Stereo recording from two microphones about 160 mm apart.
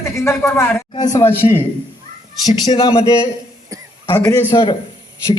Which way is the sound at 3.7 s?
20° right (ahead or behind).